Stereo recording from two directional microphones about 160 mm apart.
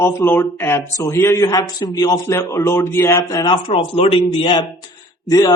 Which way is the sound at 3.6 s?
35° left (ahead or behind).